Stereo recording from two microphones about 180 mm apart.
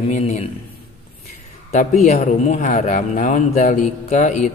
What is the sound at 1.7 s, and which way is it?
Speech, 45° left (ahead or behind).